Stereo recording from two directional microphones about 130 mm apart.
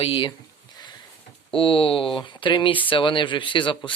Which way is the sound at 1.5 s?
45° left (ahead or behind).